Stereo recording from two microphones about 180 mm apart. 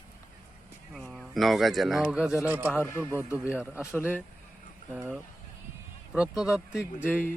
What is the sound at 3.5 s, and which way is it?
Speech, 5° right (ahead or behind).